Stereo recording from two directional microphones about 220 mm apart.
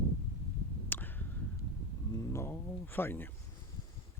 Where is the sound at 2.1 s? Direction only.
10° left (ahead or behind).